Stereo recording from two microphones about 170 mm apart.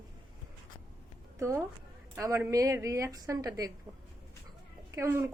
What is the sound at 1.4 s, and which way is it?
A woman's voice, 15° right (ahead or behind).